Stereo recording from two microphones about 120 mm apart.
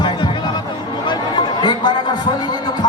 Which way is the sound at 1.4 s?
40° left (ahead or behind).